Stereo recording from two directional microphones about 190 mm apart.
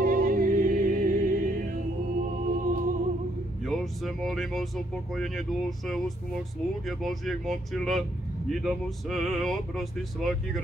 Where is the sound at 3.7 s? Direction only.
Centre (ahead or behind).